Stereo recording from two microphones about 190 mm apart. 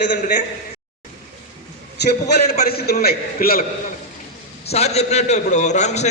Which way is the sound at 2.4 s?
35° left (ahead or behind).